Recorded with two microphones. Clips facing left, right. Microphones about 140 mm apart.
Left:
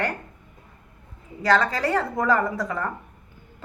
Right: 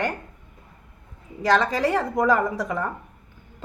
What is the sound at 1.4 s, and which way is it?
A woman's voice, 15° right (ahead or behind).